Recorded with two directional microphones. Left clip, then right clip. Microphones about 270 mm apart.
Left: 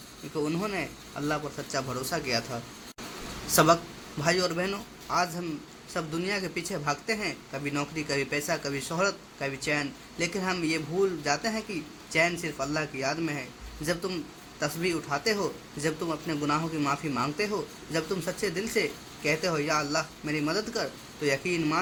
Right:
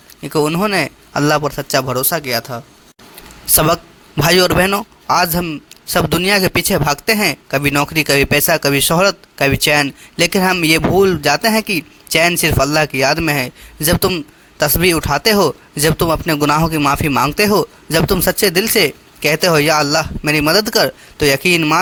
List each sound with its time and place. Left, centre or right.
0.3 s speech: right